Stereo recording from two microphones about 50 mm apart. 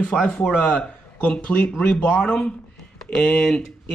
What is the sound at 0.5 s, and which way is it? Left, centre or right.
Speech, left.